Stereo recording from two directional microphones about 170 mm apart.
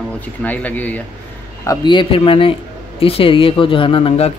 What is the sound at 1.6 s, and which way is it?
Speech, 20° left (ahead or behind).